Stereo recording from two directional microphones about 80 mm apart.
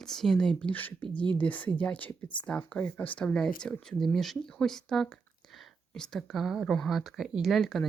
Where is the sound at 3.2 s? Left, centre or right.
Centre.